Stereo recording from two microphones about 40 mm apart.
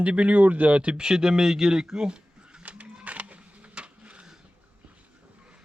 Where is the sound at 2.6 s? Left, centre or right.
Right.